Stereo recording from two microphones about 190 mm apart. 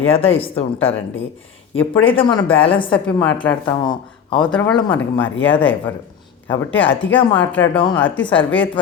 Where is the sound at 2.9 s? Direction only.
10° left (ahead or behind).